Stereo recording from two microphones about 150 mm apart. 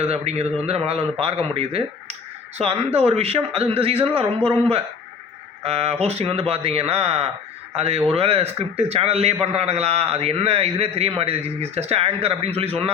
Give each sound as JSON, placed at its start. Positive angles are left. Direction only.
{"t": 0.0, "sound": "a man's voice", "side_deg": -45}